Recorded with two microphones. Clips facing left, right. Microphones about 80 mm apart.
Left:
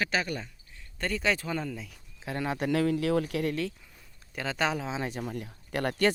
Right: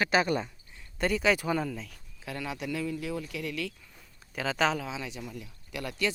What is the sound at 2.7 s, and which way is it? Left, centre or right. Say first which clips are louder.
Speech: left 9 dB; left.